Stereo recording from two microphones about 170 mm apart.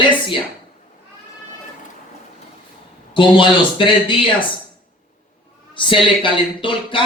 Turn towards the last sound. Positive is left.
turn(degrees=30)  # may be behind; listen again after turning